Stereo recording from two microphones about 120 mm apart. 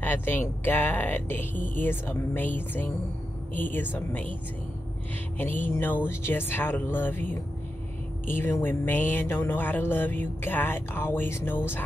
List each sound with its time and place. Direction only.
0.0 s music: 15° left (ahead or behind)
5.4 s music: 15° left (ahead or behind)